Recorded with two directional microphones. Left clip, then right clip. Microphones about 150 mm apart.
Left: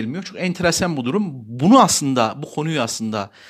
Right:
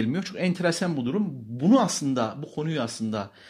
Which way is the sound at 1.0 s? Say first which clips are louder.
Left 6 dB; 55° left (ahead or behind).